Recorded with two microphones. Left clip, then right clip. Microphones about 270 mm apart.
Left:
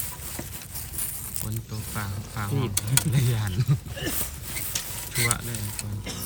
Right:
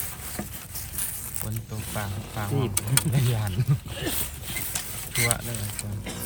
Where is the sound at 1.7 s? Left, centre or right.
Centre.